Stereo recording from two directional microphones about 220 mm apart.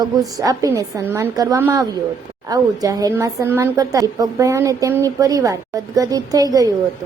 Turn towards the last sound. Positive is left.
turn(degrees=-15)  # may be behind; listen again after turning